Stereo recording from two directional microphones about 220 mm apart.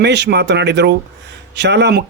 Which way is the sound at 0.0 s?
50° right (ahead or behind).